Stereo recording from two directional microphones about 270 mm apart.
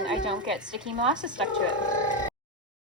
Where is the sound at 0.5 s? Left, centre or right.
Centre.